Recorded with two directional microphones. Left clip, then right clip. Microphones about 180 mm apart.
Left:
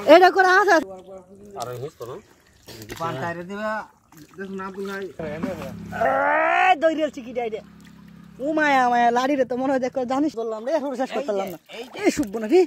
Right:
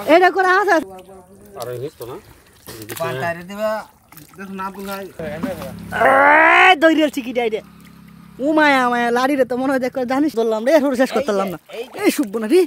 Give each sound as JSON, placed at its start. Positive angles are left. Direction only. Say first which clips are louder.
{"t": 0.0, "sound": "a woman's voice", "louder": "even", "side_deg": 10}
{"t": 2.9, "sound": "speech", "louder": "right 5 dB", "side_deg": -45}
{"t": 4.6, "sound": "speech", "louder": "right 5 dB", "side_deg": -35}
{"t": 5.2, "sound": "a woman's voice", "louder": "right 5 dB", "side_deg": 0}
{"t": 5.9, "sound": "speech", "louder": "right 9 dB", "side_deg": -30}
{"t": 8.5, "sound": "speech", "louder": "right 3 dB", "side_deg": -15}
{"t": 10.3, "sound": "speech", "louder": "right 10 dB", "side_deg": -50}
{"t": 12.0, "sound": "speech", "louder": "right 4 dB", "side_deg": -15}